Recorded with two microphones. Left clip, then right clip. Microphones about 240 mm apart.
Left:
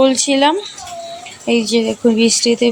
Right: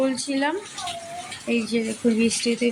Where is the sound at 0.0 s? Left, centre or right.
Left.